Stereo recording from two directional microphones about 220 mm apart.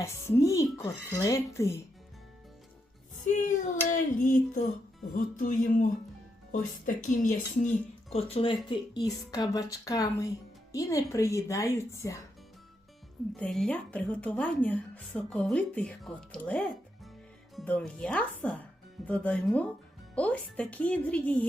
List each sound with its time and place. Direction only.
0.0 s speech: 15° left (ahead or behind)
3.2 s child singing: 35° left (ahead or behind)
8.1 s speech: 25° left (ahead or behind)
13.3 s a woman's voice: 5° left (ahead or behind)